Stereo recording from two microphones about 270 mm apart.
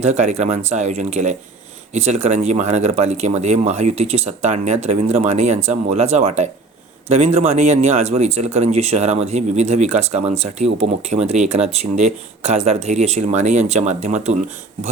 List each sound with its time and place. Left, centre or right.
0.0 s speech: right